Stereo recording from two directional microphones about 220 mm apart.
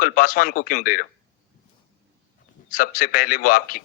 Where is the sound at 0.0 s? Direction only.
40° left (ahead or behind).